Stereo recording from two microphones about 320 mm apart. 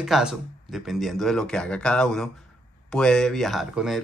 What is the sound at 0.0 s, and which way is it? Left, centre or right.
Speech, centre.